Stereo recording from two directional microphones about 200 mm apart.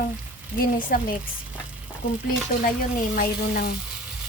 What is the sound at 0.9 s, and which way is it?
Music, 45° left (ahead or behind).